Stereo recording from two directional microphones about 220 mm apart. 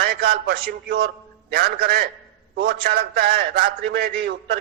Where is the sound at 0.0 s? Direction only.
45° right (ahead or behind).